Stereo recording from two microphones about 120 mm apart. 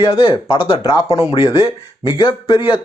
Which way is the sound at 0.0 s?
50° left (ahead or behind).